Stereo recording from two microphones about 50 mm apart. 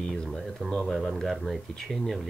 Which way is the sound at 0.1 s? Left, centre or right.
Centre.